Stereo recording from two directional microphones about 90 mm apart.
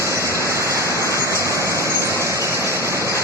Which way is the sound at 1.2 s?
35° left (ahead or behind).